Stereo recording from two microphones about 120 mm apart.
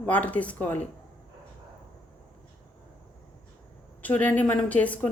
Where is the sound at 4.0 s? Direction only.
10° left (ahead or behind).